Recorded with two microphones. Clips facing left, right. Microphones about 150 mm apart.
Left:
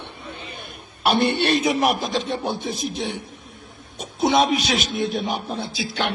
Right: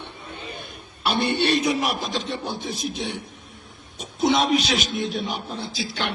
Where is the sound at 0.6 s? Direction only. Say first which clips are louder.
Left 6 dB; 55° left (ahead or behind).